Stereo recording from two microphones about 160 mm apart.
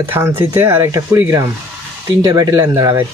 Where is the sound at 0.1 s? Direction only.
15° right (ahead or behind).